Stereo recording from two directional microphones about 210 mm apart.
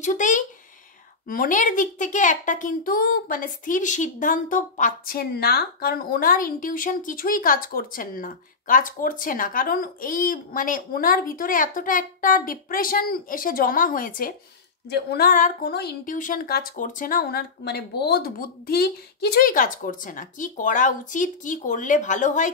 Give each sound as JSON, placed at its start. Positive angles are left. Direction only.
{"t": 0.0, "sound": "a child's voice", "side_deg": 35}